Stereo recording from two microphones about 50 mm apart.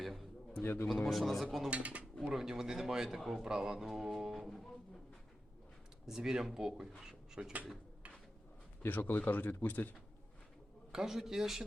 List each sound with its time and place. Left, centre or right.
0.0 s a man's voice: centre
0.6 s a man's voice: left
1.0 s a man's voice: centre
1.7 s speech: right
2.3 s speech: centre
4.4 s speech: centre
6.1 s speech: centre
8.8 s speech: left
10.9 s speech: centre